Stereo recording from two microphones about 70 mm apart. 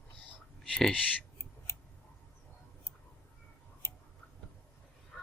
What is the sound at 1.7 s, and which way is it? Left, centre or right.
Scissors, left.